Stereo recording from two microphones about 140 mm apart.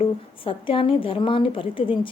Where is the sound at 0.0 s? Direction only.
40° left (ahead or behind).